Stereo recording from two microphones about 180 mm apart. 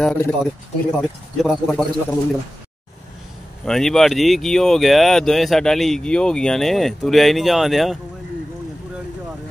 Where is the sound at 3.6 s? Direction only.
Centre (ahead or behind).